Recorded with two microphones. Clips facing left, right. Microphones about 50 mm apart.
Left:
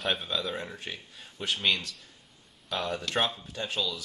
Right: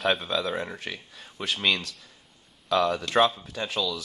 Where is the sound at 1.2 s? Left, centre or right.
Right.